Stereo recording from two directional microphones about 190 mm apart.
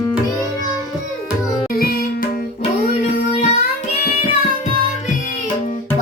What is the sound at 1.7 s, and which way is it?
Music, 55° left (ahead or behind).